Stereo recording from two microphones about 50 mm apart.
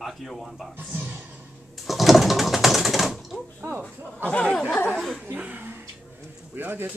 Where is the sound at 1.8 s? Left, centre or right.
Centre.